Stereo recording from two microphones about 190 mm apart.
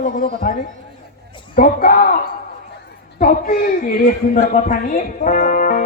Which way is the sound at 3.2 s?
45° left (ahead or behind).